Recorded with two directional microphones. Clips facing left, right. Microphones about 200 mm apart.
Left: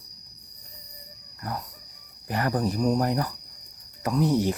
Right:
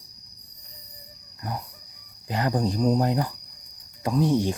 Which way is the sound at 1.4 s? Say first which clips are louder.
Even; 20° right (ahead or behind).